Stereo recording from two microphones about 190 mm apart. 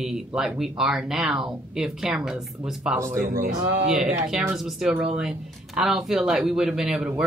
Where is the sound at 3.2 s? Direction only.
45° right (ahead or behind).